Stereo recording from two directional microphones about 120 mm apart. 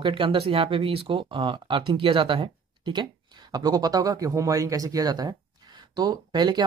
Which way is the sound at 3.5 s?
35° right (ahead or behind).